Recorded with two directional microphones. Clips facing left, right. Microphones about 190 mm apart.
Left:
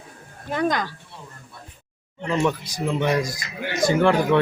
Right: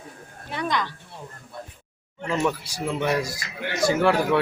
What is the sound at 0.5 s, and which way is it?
Speech, 45° left (ahead or behind).